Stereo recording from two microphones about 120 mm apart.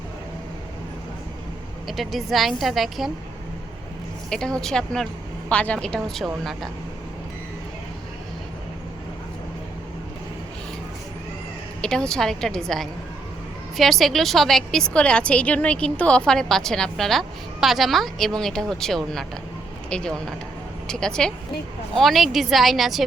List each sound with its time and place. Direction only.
1.9 s a woman's voice: centre (ahead or behind)
4.3 s a woman's voice: 5° left (ahead or behind)
11.8 s a woman's voice: 5° left (ahead or behind)